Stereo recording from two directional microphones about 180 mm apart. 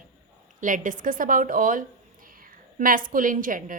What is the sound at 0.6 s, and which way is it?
A woman's voice, 45° right (ahead or behind).